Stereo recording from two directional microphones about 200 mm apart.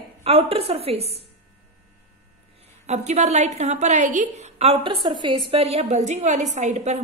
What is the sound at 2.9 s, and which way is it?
A woman's voice, 35° right (ahead or behind).